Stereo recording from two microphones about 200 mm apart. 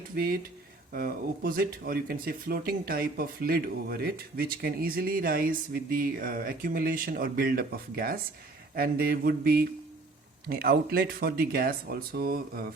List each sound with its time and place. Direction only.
0.2 s speech: 50° right (ahead or behind)